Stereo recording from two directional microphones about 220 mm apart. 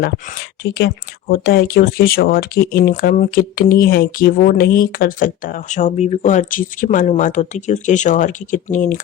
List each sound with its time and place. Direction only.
0.0 s speech: 45° left (ahead or behind)